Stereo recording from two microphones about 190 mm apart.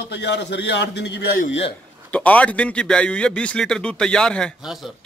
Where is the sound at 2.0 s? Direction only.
5° left (ahead or behind).